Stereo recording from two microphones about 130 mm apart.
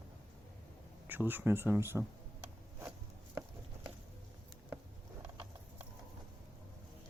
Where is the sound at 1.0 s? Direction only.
15° right (ahead or behind).